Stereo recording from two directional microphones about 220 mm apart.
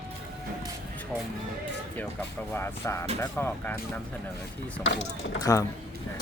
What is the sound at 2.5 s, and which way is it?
Speech, 10° left (ahead or behind).